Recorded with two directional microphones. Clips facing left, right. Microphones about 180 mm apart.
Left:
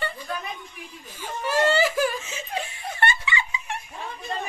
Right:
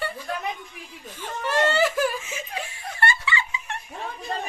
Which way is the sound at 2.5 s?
20° left (ahead or behind).